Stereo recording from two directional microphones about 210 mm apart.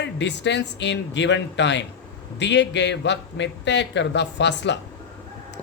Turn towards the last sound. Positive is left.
turn(degrees=55)  # may be behind; listen again after turning